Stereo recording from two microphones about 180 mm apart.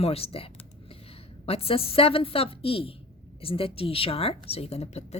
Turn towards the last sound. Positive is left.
turn(degrees=35)  # may be behind; listen again after turning